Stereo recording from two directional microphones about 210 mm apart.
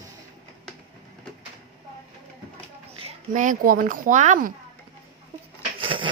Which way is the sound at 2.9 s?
30° right (ahead or behind).